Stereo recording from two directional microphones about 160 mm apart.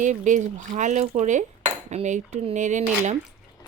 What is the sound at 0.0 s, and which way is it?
Speech, 50° right (ahead or behind).